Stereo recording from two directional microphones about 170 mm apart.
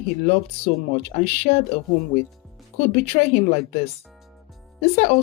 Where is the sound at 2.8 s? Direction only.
35° left (ahead or behind).